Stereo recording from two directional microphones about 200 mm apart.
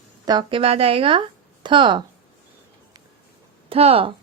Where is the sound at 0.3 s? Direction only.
25° right (ahead or behind).